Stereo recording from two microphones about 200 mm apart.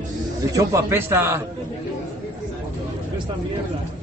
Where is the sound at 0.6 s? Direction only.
15° right (ahead or behind).